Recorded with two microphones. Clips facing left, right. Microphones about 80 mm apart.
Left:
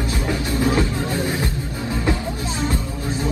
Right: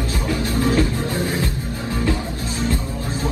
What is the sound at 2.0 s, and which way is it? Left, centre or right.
Music, left.